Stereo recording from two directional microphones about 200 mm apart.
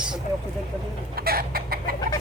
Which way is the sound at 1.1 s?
50° right (ahead or behind).